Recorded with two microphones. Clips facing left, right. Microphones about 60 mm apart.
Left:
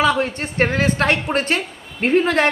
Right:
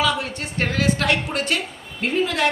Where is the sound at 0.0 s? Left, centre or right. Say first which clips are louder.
Left 5 dB; left.